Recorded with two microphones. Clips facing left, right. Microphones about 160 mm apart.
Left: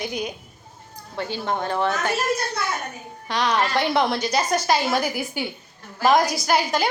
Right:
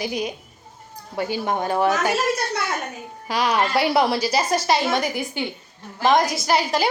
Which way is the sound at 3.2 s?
10° right (ahead or behind).